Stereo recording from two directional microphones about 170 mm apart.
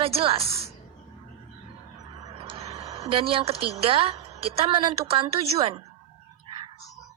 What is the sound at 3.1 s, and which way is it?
A woman's voice, 30° right (ahead or behind).